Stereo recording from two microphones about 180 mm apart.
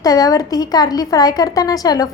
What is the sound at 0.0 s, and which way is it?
A woman's voice, 20° left (ahead or behind).